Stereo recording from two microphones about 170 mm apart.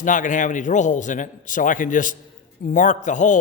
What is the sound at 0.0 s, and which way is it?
A man's voice, 50° left (ahead or behind).